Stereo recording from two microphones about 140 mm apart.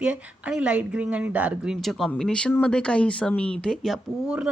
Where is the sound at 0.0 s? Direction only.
10° right (ahead or behind).